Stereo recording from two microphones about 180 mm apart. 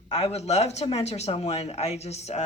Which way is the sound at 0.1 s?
35° left (ahead or behind).